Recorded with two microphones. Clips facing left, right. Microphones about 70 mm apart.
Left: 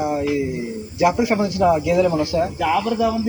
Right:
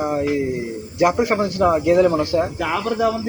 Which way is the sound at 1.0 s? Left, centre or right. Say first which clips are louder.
Even; right.